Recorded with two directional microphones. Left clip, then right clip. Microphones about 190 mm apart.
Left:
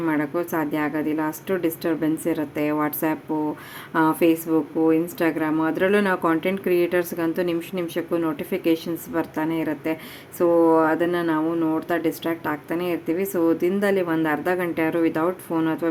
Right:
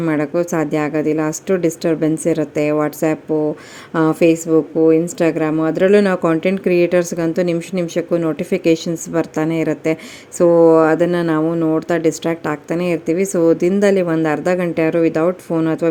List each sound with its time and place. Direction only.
0.0 s a woman's voice: 25° right (ahead or behind)